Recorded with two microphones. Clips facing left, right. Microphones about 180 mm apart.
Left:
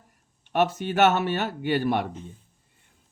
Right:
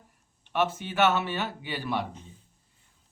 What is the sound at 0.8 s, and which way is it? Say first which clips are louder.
Speech: left 4 dB; 45° left (ahead or behind).